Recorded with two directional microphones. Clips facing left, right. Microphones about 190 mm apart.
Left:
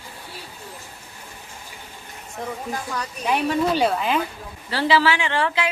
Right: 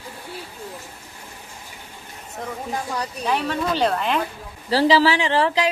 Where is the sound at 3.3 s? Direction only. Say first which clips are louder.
Left 3 dB; 15° left (ahead or behind).